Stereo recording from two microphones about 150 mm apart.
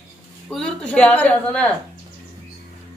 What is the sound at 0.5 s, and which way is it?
Speech, 5° left (ahead or behind).